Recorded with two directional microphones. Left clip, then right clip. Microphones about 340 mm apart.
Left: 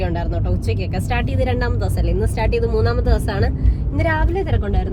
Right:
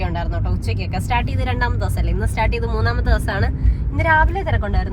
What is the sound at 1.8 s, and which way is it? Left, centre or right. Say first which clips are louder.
Speech: left 3 dB; right.